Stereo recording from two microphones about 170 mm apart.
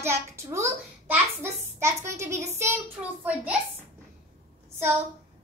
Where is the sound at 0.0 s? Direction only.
15° right (ahead or behind).